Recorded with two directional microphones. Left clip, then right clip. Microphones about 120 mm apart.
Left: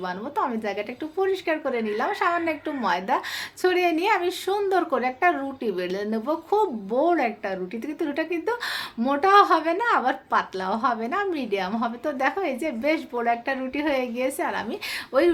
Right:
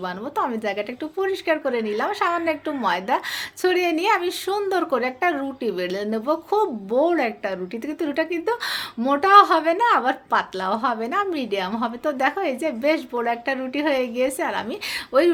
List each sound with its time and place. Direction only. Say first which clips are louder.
0.3 s a woman's voice: right 3 dB; 40° right (ahead or behind)